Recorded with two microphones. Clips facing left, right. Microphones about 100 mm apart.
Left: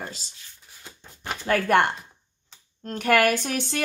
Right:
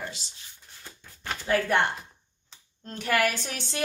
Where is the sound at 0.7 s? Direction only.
15° left (ahead or behind).